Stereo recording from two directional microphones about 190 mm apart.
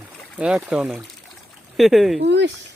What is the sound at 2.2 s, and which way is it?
Speech, 65° right (ahead or behind).